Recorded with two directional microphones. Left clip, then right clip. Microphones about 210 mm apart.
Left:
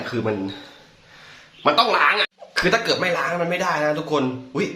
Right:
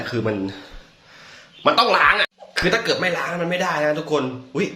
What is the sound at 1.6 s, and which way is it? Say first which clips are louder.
Speech: right 2 dB; 15° right (ahead or behind).